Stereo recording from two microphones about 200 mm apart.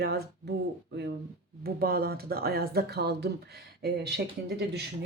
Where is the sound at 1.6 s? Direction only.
50° right (ahead or behind).